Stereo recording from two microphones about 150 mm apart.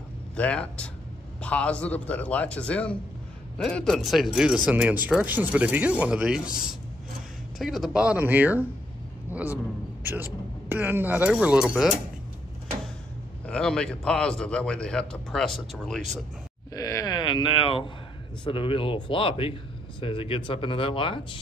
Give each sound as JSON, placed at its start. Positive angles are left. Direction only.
{"t": 0.4, "sound": "a man's voice", "side_deg": 10}
{"t": 10.0, "sound": "speech", "side_deg": -15}
{"t": 13.5, "sound": "a man's voice", "side_deg": 5}
{"t": 16.7, "sound": "speech", "side_deg": 25}